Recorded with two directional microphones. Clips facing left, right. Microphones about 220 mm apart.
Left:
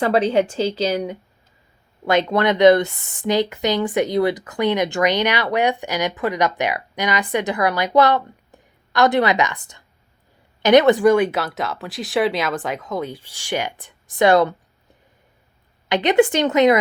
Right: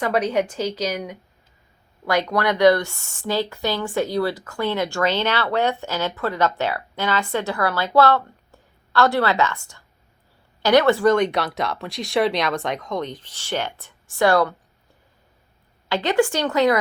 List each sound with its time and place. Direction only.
0.0 s a woman's voice: 30° left (ahead or behind)
15.9 s a woman's voice: 20° left (ahead or behind)